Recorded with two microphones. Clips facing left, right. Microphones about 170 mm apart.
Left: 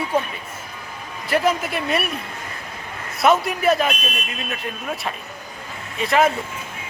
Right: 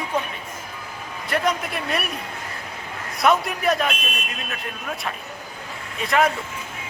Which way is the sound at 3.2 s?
Centre (ahead or behind).